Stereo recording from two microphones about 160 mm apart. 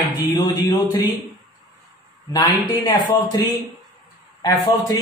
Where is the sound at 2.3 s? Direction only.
25° left (ahead or behind).